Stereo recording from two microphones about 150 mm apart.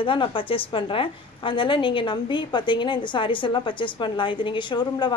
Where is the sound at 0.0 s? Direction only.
35° left (ahead or behind).